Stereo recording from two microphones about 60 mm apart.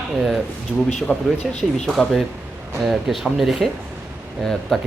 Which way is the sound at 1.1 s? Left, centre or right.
Left.